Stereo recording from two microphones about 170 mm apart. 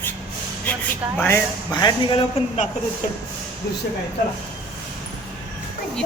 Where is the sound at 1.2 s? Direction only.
20° left (ahead or behind).